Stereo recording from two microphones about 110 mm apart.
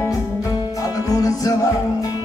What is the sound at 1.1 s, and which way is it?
Music, 35° left (ahead or behind).